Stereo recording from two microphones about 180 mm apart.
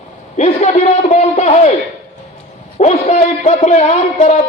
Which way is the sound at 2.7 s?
40° left (ahead or behind).